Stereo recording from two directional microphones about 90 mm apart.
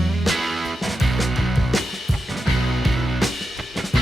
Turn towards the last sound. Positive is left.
turn(degrees=0)  # may be behind; listen again after turning